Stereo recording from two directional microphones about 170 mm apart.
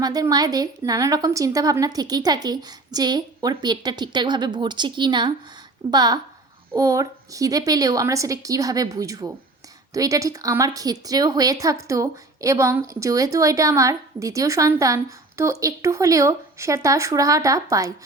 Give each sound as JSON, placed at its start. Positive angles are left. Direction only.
{"t": 0.0, "sound": "a woman's voice", "side_deg": -25}